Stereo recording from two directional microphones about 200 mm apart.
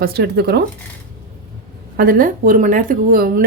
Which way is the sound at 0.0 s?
55° right (ahead or behind).